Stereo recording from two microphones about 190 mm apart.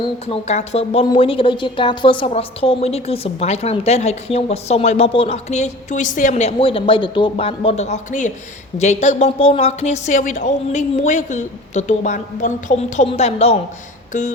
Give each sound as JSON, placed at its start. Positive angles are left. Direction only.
{"t": 0.0, "sound": "a woman's voice", "side_deg": 30}